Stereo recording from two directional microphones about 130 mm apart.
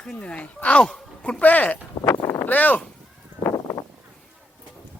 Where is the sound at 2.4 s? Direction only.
15° left (ahead or behind).